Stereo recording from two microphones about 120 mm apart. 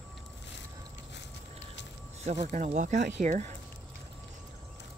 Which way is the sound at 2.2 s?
65° right (ahead or behind).